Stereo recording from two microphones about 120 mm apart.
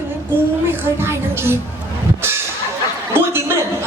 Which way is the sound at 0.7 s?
20° right (ahead or behind).